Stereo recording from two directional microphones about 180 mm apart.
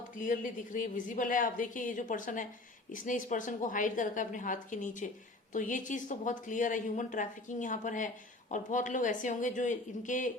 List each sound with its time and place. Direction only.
0.2 s a woman's voice: 45° left (ahead or behind)